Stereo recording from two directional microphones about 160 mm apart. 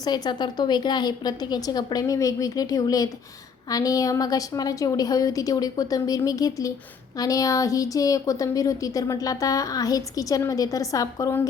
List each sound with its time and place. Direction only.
0.0 s a woman's voice: 25° left (ahead or behind)